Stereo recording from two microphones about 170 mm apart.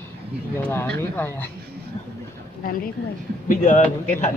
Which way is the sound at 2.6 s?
55° left (ahead or behind).